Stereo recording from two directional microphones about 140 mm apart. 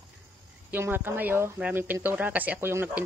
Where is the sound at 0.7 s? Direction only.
15° right (ahead or behind).